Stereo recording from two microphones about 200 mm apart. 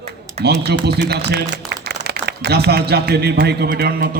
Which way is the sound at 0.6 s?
55° right (ahead or behind).